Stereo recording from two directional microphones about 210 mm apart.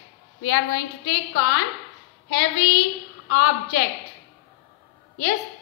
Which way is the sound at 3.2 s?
55° left (ahead or behind).